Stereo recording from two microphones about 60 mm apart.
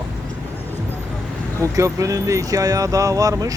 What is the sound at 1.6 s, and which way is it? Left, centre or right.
Speech, right.